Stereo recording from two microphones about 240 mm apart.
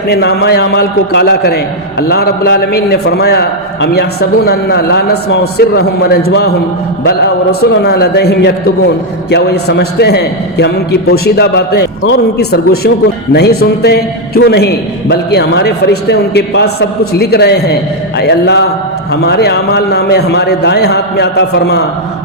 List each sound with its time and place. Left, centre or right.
0.1 s a man's voice: left
7.6 s a man's voice: left